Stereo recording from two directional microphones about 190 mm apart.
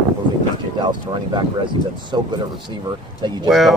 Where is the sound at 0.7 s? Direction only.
25° right (ahead or behind).